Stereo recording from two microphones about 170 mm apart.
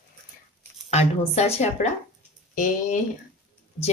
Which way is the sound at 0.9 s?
40° left (ahead or behind).